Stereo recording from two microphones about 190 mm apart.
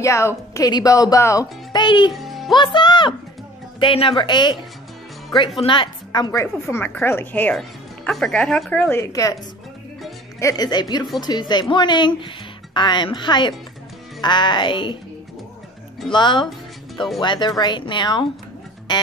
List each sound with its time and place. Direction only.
0.0 s a woman's voice: 15° left (ahead or behind)
2.1 s music: centre (ahead or behind)
2.5 s speech: 25° left (ahead or behind)
5.6 s a woman's voice: 25° left (ahead or behind)
10.4 s speech: 20° left (ahead or behind)
16.1 s speech: 25° left (ahead or behind)